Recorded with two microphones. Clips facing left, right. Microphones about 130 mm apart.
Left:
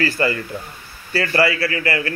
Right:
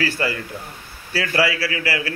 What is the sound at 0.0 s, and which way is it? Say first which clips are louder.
A man's voice: left 3 dB; centre (ahead or behind).